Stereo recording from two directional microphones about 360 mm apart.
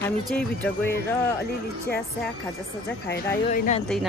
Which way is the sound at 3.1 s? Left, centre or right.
Left.